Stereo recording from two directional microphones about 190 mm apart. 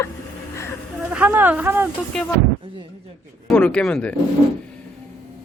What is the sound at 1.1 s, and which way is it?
Speech, 10° right (ahead or behind).